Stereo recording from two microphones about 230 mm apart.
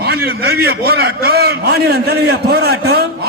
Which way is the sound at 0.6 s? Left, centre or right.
Right.